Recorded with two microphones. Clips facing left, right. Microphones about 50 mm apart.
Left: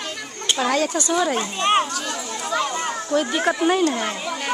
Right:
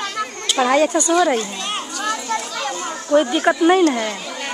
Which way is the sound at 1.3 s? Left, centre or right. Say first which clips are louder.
Left 3 dB; left.